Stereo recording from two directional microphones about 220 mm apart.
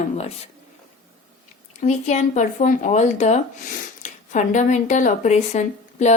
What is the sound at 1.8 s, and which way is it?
Speech, 30° left (ahead or behind).